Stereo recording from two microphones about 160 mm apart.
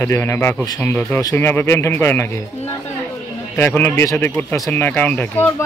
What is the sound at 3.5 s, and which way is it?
Speech, 15° left (ahead or behind).